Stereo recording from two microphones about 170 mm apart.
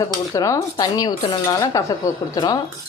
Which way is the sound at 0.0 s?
20° left (ahead or behind).